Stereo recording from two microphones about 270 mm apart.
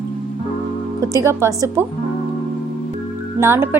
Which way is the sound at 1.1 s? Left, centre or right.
Centre.